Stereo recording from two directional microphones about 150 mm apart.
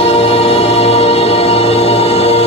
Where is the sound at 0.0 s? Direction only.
40° left (ahead or behind).